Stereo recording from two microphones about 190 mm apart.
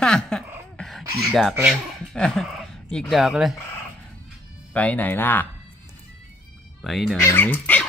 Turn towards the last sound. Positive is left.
turn(degrees=10)  # may be behind; listen again after turning